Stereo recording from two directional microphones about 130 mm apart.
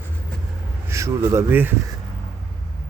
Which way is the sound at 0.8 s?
20° right (ahead or behind).